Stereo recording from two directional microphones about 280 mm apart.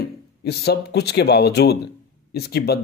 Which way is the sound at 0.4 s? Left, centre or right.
Left.